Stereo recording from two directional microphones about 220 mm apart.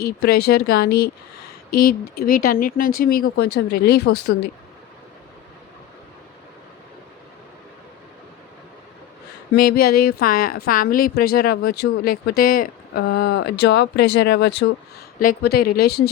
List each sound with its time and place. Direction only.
0.0 s a woman's voice: 45° left (ahead or behind)
9.5 s a woman's voice: 45° left (ahead or behind)